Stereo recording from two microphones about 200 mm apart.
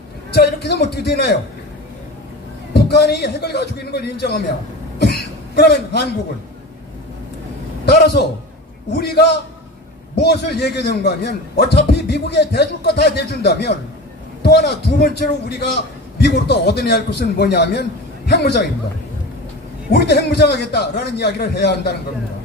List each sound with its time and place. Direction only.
0.3 s a man's voice: 55° left (ahead or behind)
2.7 s a man's voice: 55° left (ahead or behind)
4.9 s cough: 55° left (ahead or behind)
7.8 s a man's voice: 55° left (ahead or behind)
19.9 s a man's voice: 55° left (ahead or behind)